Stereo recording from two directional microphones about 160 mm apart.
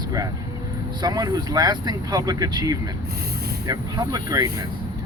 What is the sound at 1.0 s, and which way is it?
Speech, 25° right (ahead or behind).